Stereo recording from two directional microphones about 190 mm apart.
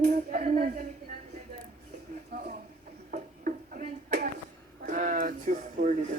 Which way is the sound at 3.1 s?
45° right (ahead or behind).